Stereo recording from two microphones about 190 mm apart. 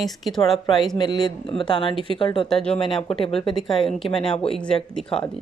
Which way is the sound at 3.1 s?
30° left (ahead or behind).